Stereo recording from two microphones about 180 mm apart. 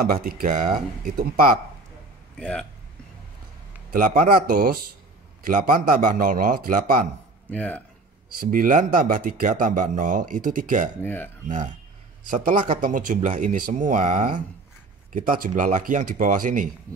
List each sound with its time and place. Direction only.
0.0 s speech: 55° right (ahead or behind)
2.3 s speech: 5° left (ahead or behind)
3.9 s speech: 50° right (ahead or behind)
7.5 s speech: 10° left (ahead or behind)
8.4 s speech: 50° right (ahead or behind)
11.0 s speech: 10° left (ahead or behind)
11.4 s speech: 45° right (ahead or behind)